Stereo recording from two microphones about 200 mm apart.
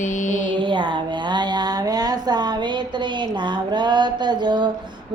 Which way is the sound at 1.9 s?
20° right (ahead or behind).